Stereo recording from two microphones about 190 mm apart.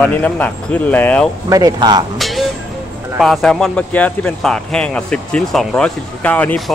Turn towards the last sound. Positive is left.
turn(degrees=10)  # may be behind; listen again after turning